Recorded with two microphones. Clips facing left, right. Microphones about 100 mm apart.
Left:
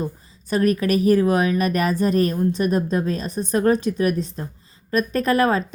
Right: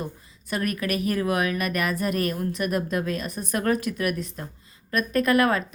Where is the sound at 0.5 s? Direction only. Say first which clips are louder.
Left 8 dB; 35° left (ahead or behind).